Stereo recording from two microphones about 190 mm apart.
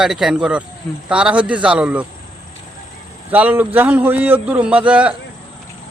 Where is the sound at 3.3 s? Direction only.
10° right (ahead or behind).